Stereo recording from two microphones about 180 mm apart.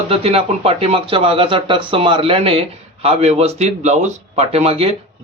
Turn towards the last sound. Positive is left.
turn(degrees=-35)  # may be behind; listen again after turning